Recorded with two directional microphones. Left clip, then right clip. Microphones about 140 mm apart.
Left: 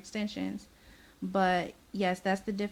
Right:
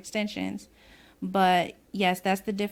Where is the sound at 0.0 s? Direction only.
40° right (ahead or behind).